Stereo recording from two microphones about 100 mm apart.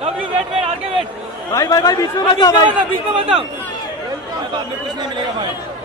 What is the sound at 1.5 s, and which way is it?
A man's voice, 35° left (ahead or behind).